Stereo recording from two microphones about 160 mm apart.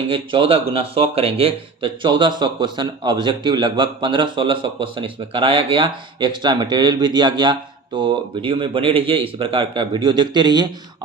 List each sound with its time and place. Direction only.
0.1 s speech: 35° right (ahead or behind)